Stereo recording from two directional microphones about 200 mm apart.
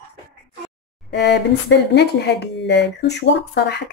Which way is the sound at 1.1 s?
60° left (ahead or behind).